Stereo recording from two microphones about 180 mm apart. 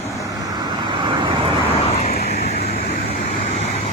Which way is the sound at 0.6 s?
25° right (ahead or behind).